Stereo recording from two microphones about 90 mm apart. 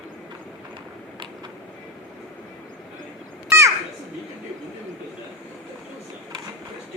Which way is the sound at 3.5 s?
35° right (ahead or behind).